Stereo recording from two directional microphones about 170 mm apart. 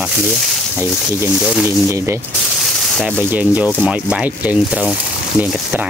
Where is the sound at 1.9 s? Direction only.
15° right (ahead or behind).